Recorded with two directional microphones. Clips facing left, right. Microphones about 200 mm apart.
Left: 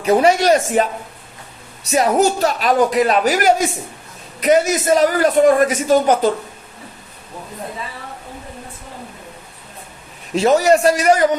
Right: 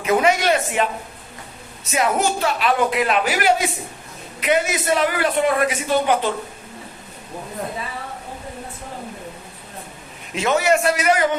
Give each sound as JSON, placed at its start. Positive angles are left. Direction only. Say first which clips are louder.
{"t": 0.0, "sound": "a man's voice", "louder": "left 4 dB", "side_deg": 35}
{"t": 1.9, "sound": "a man's voice", "louder": "left 5 dB", "side_deg": 40}
{"t": 10.3, "sound": "a man's voice", "louder": "left 5 dB", "side_deg": 35}